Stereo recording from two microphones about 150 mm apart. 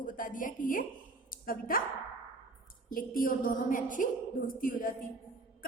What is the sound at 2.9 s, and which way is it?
A woman's voice, 70° left (ahead or behind).